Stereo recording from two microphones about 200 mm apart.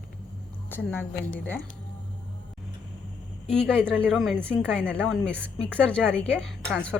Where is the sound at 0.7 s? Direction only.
10° left (ahead or behind).